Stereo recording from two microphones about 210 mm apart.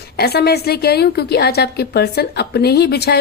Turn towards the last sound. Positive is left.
turn(degrees=50)  # may be behind; listen again after turning